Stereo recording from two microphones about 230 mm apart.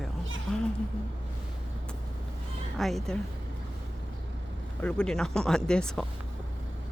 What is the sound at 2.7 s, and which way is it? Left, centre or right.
Speech, centre.